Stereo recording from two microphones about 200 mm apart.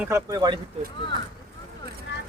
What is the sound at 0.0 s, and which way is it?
Speech, 15° right (ahead or behind).